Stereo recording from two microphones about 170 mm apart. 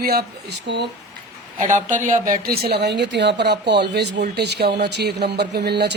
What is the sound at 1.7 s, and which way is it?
Speech, 45° right (ahead or behind).